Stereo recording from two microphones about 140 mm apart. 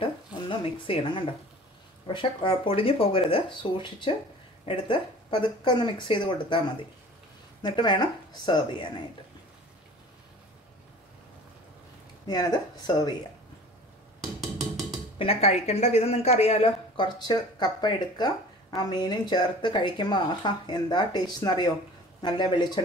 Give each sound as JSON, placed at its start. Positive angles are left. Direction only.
{"t": 0.0, "sound": "a sound", "side_deg": 40}
{"t": 2.0, "sound": "speech", "side_deg": 35}
{"t": 7.6, "sound": "speech", "side_deg": 35}
{"t": 12.3, "sound": "speech", "side_deg": 30}
{"t": 15.1, "sound": "speech", "side_deg": 45}